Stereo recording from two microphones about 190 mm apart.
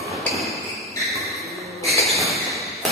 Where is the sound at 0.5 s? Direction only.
15° left (ahead or behind).